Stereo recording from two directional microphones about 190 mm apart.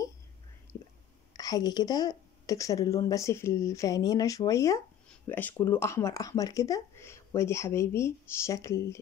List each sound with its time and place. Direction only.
1.3 s a woman's voice: 20° left (ahead or behind)